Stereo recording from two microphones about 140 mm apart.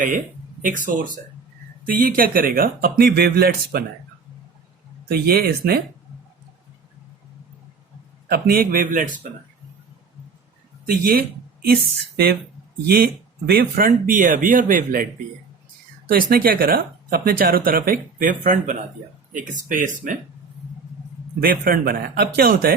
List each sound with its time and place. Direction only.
0.9 s speech: 75° right (ahead or behind); by 3.8 s 90° right
5.1 s speech: 90° right
8.3 s speech: 90° right; by 9.2 s 70° right (ahead or behind)
10.8 s speech: 90° right
13.5 s speech: 85° right
16.0 s speech: 90° right; by 20.1 s 70° right (ahead or behind)
21.4 s speech: 90° right